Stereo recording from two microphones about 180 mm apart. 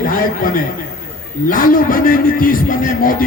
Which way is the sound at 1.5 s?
50° left (ahead or behind).